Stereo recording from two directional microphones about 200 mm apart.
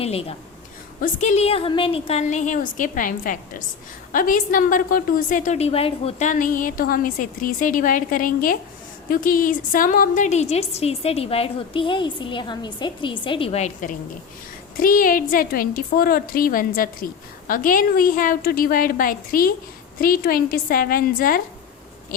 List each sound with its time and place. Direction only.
0.0 s a woman's voice: 30° left (ahead or behind); by 21.4 s 45° left (ahead or behind)